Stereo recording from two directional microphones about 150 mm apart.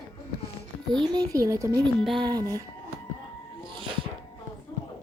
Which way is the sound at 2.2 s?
25° right (ahead or behind).